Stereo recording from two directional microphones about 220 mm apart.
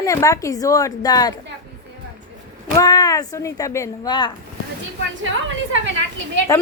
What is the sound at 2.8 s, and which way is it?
Speech, 15° left (ahead or behind).